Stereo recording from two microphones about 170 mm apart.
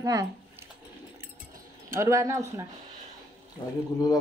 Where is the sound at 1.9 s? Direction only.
15° right (ahead or behind).